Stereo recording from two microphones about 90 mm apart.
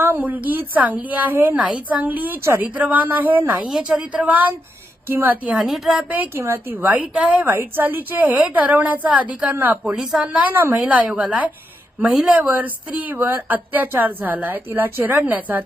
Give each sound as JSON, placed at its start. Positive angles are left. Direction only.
{"t": 0.0, "sound": "a woman's voice", "side_deg": -20}
{"t": 1.5, "sound": "a woman's voice", "side_deg": -15}
{"t": 3.7, "sound": "a woman's voice", "side_deg": -10}
{"t": 5.5, "sound": "a woman's voice", "side_deg": -5}
{"t": 9.8, "sound": "a woman's voice", "side_deg": -5}
{"t": 10.8, "sound": "a woman's voice", "side_deg": -15}